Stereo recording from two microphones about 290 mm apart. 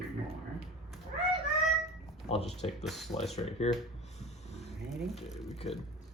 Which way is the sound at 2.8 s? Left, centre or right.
Centre.